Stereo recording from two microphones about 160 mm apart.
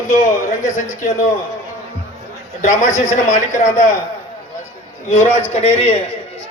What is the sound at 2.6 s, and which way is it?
A man's voice, 50° left (ahead or behind).